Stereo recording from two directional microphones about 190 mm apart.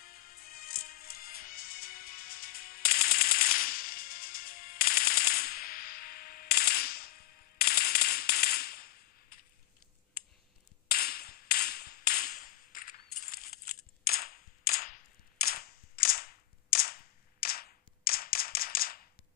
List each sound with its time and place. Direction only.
0.0 s music: 50° left (ahead or behind)
10.9 s a sound: 50° left (ahead or behind)
14.0 s cap gun: 50° left (ahead or behind)